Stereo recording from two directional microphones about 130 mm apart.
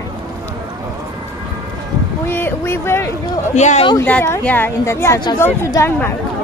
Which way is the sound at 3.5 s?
65° left (ahead or behind).